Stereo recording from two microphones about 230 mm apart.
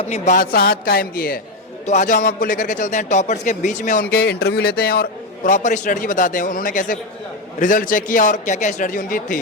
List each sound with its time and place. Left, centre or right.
0.1 s a man's voice: left
4.1 s a man's voice: left